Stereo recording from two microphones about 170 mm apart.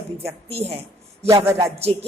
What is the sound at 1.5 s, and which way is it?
Speech, 20° right (ahead or behind).